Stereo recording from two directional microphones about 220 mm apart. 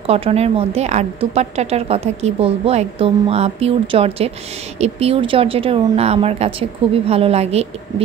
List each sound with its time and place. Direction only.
0.0 s a woman's voice: 25° right (ahead or behind)